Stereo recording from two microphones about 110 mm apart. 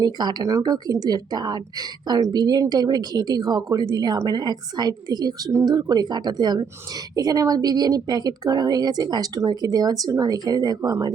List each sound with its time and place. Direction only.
0.0 s a woman's voice: 40° right (ahead or behind)
10.8 s speech: 25° right (ahead or behind)